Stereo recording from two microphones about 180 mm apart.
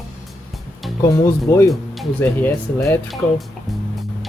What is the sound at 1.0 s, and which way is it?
Speech, 15° left (ahead or behind).